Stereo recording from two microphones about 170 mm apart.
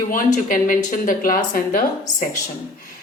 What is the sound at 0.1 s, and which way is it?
Speech, 50° left (ahead or behind).